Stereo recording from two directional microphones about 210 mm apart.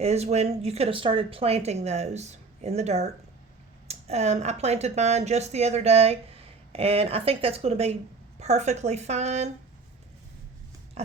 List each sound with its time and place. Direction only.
0.0 s speech: 30° right (ahead or behind)
11.0 s pig: 30° right (ahead or behind)